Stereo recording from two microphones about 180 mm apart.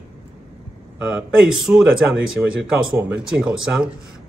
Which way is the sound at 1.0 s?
5° right (ahead or behind).